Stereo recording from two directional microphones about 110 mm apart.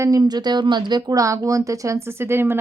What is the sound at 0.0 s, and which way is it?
A woman's voice, 35° right (ahead or behind).